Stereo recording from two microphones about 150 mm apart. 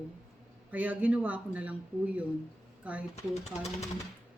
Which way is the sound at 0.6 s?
10° right (ahead or behind).